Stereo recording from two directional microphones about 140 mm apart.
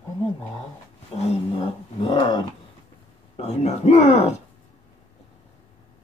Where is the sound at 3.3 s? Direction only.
50° left (ahead or behind).